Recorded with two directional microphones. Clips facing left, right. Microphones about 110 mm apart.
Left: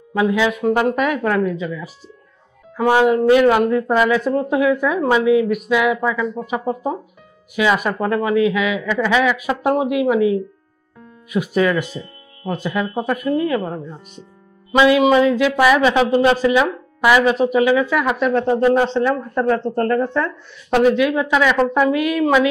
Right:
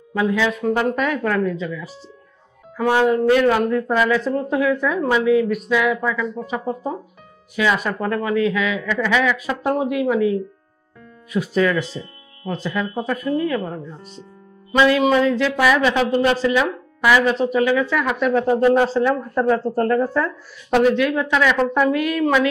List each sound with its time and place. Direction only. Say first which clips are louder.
0.1 s speech: left 2 dB; 15° left (ahead or behind)
6.4 s speech: left 3 dB; 15° left (ahead or behind)
13.6 s speech: left 2 dB; 35° left (ahead or behind)
14.7 s speech: left 3 dB; 10° left (ahead or behind)
18.2 s speech: right 1 dB; 5° right (ahead or behind)
20.8 s speech: left 3 dB; 10° left (ahead or behind)